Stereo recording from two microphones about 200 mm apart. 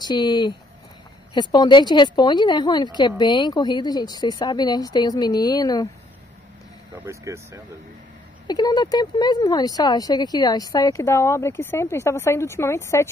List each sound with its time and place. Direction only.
0.0 s a woman's voice: 20° left (ahead or behind)
7.1 s speech: 15° right (ahead or behind)
8.5 s speech: 20° left (ahead or behind)